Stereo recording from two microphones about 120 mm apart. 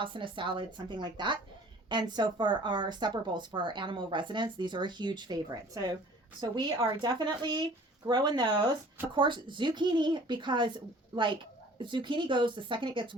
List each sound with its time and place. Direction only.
0.0 s speech: 45° right (ahead or behind)